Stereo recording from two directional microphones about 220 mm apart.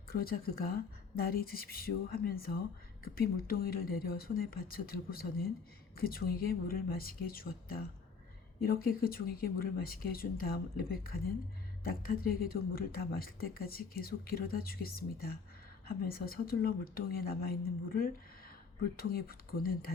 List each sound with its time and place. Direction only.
0.1 s speech: 45° left (ahead or behind)